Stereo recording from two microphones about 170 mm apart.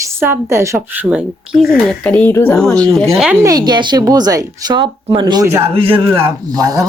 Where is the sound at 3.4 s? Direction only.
25° right (ahead or behind).